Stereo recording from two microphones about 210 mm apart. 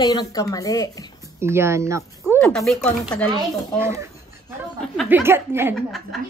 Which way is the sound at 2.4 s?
Centre (ahead or behind).